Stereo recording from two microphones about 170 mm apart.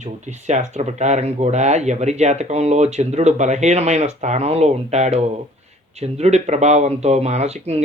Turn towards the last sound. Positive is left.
turn(degrees=-40)  # may be behind; listen again after turning